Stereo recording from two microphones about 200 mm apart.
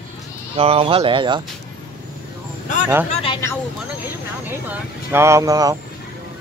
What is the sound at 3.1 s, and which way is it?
Speech, 25° left (ahead or behind).